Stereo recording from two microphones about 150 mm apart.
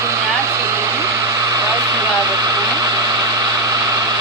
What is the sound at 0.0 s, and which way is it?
Hair dryer, 20° right (ahead or behind).